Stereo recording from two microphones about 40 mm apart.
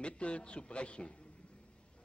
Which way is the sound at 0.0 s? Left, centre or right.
Left.